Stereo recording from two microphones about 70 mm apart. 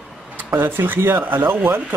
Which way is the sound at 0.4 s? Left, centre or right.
Right.